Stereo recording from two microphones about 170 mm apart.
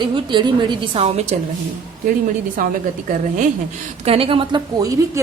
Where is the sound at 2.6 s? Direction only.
55° right (ahead or behind).